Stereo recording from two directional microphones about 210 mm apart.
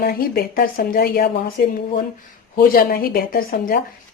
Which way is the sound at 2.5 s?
45° left (ahead or behind).